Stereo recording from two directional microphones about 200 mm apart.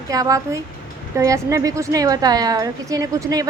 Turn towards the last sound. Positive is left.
turn(degrees=-15)  # may be behind; listen again after turning